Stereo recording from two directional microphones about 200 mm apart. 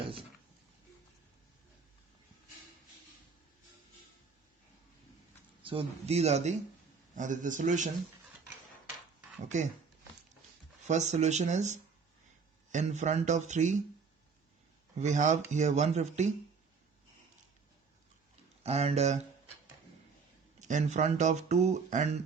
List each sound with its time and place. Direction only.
5.6 s speech: 30° right (ahead or behind)
10.8 s speech: 35° right (ahead or behind)
14.9 s speech: 35° right (ahead or behind)
18.6 s speech: 30° right (ahead or behind)
20.6 s speech: 40° right (ahead or behind)